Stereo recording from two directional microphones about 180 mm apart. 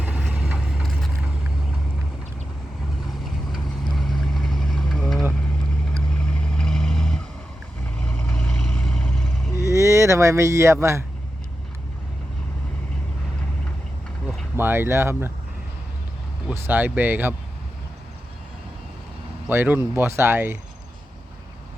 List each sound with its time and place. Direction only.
0.0 s vehicle: 5° right (ahead or behind)
3.2 s vehicle: centre (ahead or behind)
9.7 s speech: 15° right (ahead or behind)
14.5 s speech: 10° right (ahead or behind)
16.5 s speech: 10° right (ahead or behind)
19.5 s speech: 10° right (ahead or behind)